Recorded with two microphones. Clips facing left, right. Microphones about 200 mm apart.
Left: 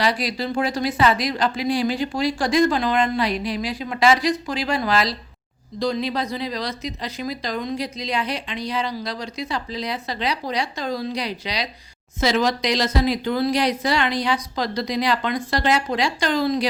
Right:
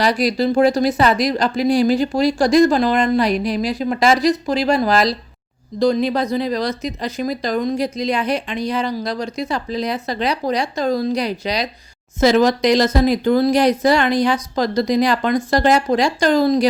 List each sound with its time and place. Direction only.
0.0 s speech: 45° right (ahead or behind)